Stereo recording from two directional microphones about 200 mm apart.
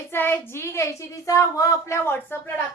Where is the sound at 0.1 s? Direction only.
10° left (ahead or behind).